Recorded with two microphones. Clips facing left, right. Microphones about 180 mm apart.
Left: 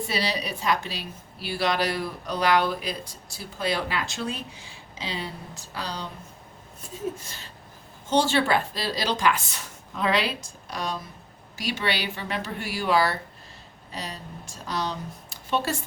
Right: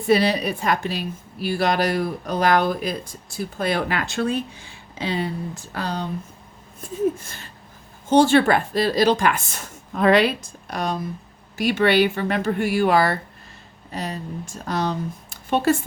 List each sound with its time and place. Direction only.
0.1 s a woman's voice: 50° right (ahead or behind)
7.2 s a woman's voice: 55° right (ahead or behind)